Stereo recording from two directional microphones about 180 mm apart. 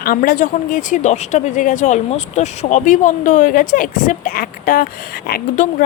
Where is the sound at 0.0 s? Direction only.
55° left (ahead or behind).